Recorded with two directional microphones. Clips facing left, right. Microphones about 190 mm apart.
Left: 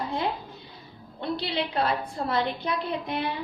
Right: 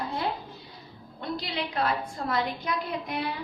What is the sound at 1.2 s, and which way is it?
A woman's voice, 30° left (ahead or behind).